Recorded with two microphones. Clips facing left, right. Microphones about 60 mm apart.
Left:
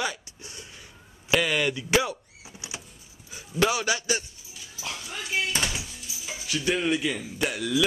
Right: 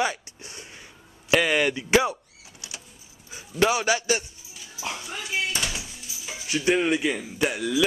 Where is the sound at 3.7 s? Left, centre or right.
Right.